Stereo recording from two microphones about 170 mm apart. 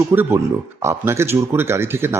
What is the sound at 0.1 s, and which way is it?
Speech, 15° right (ahead or behind).